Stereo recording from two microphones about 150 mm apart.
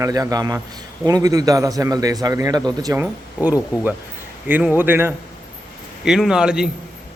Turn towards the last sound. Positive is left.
turn(degrees=-5)  # may be behind; listen again after turning